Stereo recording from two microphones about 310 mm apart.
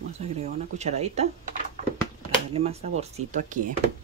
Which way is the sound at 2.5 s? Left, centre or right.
Centre.